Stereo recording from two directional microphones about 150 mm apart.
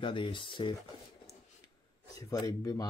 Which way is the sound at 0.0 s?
35° left (ahead or behind).